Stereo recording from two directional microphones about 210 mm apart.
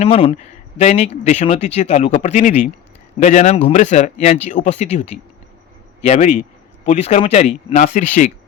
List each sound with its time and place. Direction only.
0.0 s speech: 25° left (ahead or behind)